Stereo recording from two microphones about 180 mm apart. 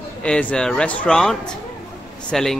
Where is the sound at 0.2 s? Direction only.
5° left (ahead or behind).